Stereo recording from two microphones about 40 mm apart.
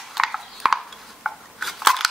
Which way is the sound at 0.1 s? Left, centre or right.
Centre.